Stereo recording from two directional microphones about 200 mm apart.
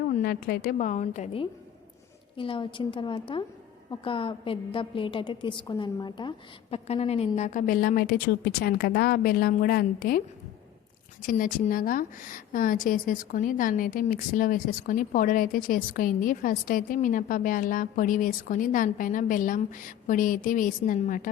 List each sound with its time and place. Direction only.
0.1 s a woman's voice: 50° left (ahead or behind)
11.3 s a woman's voice: 45° left (ahead or behind)